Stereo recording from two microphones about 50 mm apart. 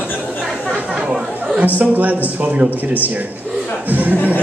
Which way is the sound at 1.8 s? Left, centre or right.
Right.